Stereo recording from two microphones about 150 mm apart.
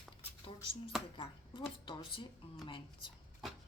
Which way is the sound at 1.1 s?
35° left (ahead or behind).